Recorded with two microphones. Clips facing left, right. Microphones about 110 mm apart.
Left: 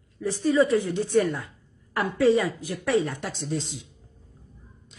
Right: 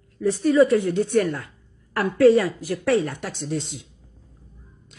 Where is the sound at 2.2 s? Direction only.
Centre (ahead or behind).